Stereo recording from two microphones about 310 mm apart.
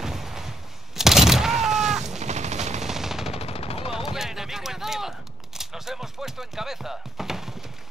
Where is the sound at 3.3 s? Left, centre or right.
Centre.